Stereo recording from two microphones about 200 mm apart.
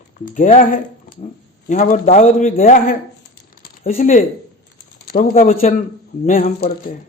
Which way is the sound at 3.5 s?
50° left (ahead or behind).